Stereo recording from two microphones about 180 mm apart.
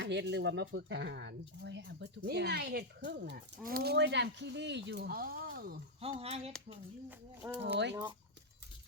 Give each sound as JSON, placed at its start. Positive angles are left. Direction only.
{"t": 0.0, "sound": "speech", "side_deg": -75}
{"t": 6.0, "sound": "speech", "side_deg": -35}
{"t": 7.4, "sound": "speech", "side_deg": -15}